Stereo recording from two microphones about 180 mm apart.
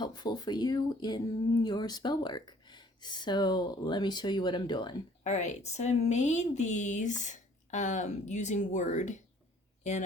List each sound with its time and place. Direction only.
0.0 s speech: 25° left (ahead or behind)
5.2 s a woman's voice: 40° left (ahead or behind)